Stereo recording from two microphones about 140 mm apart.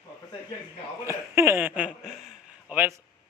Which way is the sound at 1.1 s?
20° right (ahead or behind).